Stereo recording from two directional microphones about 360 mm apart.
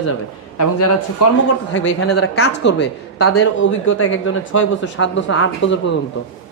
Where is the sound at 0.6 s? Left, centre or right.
Left.